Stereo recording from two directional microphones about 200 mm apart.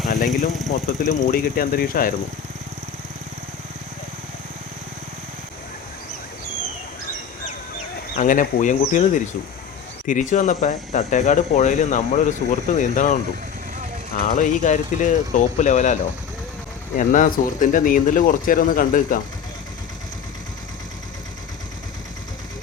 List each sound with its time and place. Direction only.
0.3 s speech: centre (ahead or behind)
1.0 s speech: 40° left (ahead or behind)
8.1 s speech: 40° left (ahead or behind)
14.3 s speech: 40° left (ahead or behind)
17.0 s speech: 40° left (ahead or behind)